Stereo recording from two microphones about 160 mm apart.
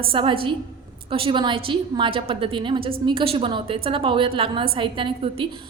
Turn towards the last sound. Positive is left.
turn(degrees=-30)  # may be behind; listen again after turning